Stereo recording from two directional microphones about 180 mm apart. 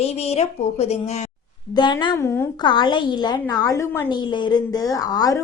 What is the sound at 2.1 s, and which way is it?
Speech, 15° left (ahead or behind).